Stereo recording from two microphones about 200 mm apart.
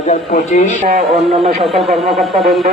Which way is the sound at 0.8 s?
35° right (ahead or behind).